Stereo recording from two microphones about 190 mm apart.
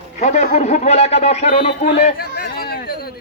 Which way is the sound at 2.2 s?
55° left (ahead or behind).